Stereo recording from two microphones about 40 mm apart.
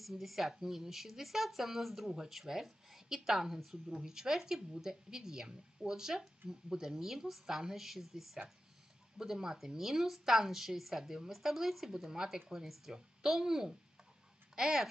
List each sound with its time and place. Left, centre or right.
0.0 s speech: centre